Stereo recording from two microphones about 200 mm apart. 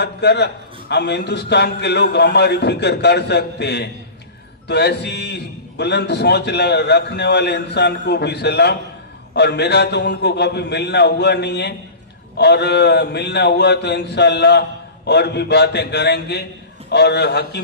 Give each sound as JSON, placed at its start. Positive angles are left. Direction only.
{"t": 0.0, "sound": "a man's voice", "side_deg": 55}